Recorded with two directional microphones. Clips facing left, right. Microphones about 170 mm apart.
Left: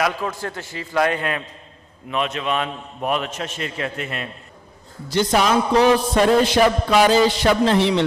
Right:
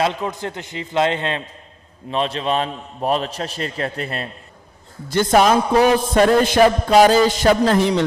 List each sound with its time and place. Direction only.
0.0 s a man's voice: 20° right (ahead or behind)
5.0 s a man's voice: 50° right (ahead or behind)